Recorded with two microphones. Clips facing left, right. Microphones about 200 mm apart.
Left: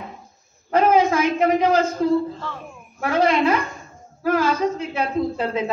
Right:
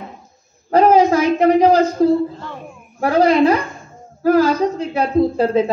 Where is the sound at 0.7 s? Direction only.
35° right (ahead or behind).